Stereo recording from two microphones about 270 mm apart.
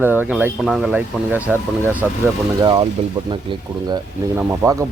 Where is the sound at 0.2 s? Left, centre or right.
Centre.